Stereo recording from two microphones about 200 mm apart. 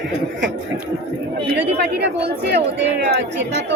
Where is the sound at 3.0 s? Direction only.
60° right (ahead or behind).